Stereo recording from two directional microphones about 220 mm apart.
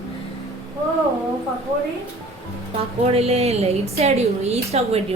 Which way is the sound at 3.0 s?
30° right (ahead or behind).